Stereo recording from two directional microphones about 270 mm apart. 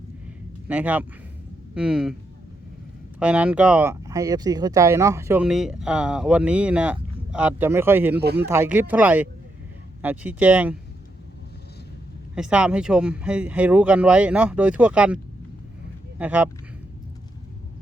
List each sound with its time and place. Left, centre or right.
0.7 s speech: centre
3.2 s speech: centre
8.2 s speech: right
8.4 s speech: centre
12.3 s speech: centre